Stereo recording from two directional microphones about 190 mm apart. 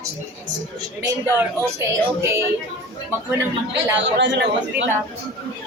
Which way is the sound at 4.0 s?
70° right (ahead or behind).